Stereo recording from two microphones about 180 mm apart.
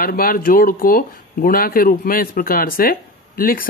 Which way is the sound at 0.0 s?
55° left (ahead or behind).